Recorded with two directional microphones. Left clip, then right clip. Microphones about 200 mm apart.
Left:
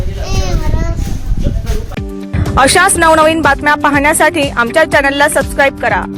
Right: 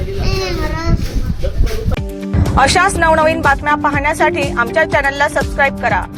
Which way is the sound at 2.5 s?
45° left (ahead or behind).